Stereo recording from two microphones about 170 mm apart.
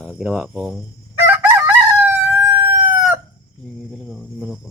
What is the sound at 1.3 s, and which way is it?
Crowing, 15° right (ahead or behind).